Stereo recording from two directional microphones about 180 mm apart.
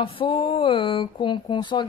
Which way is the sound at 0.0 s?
30° left (ahead or behind).